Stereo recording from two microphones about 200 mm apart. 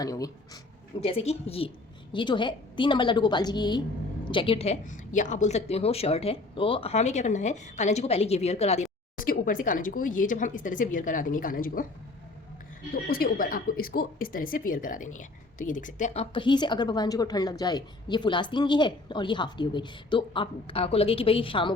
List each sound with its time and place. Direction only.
0.0 s speech: 15° left (ahead or behind)
1.0 s a woman's voice: 30° left (ahead or behind)
13.1 s a woman's voice: 45° left (ahead or behind); by 21.7 s 25° left (ahead or behind)